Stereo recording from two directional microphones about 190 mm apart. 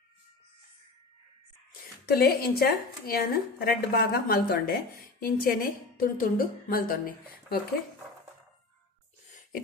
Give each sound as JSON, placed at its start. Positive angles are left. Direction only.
{"t": 2.0, "sound": "a woman's voice", "side_deg": 55}